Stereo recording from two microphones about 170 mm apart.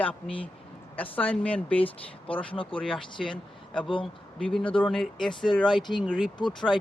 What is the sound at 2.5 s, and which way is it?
Speech, 30° left (ahead or behind).